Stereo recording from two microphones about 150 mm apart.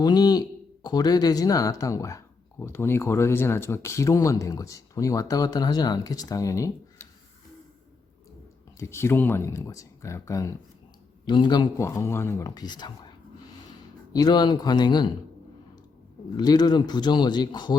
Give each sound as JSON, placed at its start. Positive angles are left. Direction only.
{"t": 0.0, "sound": "speech", "side_deg": 25}
{"t": 8.8, "sound": "speech", "side_deg": 15}
{"t": 11.3, "sound": "speech", "side_deg": 30}
{"t": 16.4, "sound": "speech", "side_deg": 25}